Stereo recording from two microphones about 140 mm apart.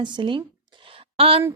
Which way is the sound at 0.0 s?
35° right (ahead or behind).